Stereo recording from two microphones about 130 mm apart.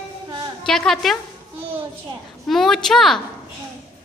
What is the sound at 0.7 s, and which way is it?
Speech, 5° left (ahead or behind).